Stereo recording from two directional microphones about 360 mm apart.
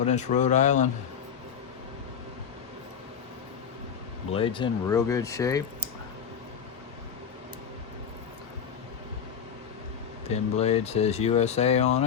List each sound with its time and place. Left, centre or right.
0.0 s speech: centre
4.3 s speech: centre
10.2 s speech: centre